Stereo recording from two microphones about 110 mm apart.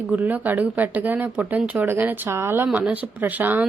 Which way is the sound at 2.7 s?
5° right (ahead or behind).